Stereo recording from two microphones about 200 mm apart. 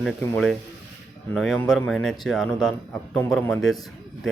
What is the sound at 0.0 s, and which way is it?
A man's voice, centre (ahead or behind).